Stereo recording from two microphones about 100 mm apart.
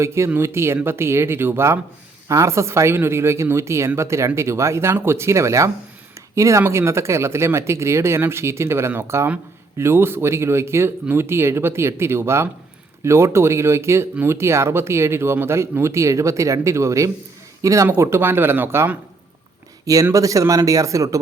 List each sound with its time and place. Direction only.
0.0 s speech: 25° right (ahead or behind)
19.8 s speech: 35° right (ahead or behind)